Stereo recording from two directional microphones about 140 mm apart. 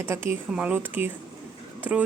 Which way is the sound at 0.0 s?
15° right (ahead or behind).